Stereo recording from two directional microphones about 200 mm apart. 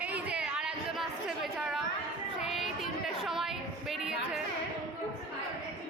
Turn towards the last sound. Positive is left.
turn(degrees=0)  # may be behind; listen again after turning